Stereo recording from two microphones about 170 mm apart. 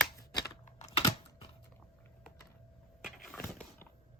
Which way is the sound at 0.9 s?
35° left (ahead or behind).